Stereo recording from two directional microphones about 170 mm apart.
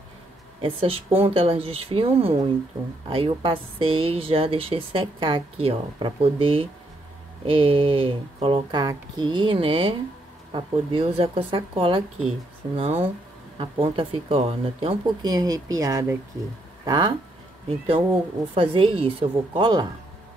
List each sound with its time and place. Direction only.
0.6 s a woman's voice: 30° right (ahead or behind)
13.6 s a woman's voice: 35° right (ahead or behind)